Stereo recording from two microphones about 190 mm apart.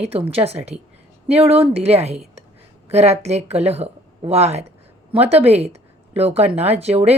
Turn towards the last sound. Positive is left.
turn(degrees=-30)  # may be behind; listen again after turning